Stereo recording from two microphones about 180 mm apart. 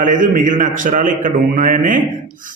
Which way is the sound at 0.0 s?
45° right (ahead or behind).